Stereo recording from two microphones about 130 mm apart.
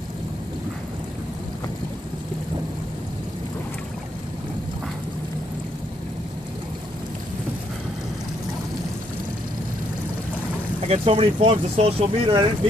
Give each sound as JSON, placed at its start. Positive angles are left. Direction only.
{"t": 10.9, "sound": "speech", "side_deg": -45}